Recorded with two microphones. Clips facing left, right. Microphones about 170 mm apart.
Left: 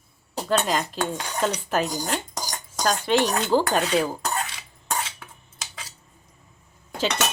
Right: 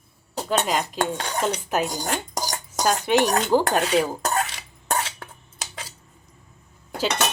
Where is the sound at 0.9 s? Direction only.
60° right (ahead or behind).